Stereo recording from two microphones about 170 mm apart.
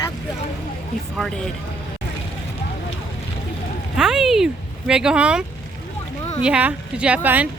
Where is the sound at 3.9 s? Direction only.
5° right (ahead or behind).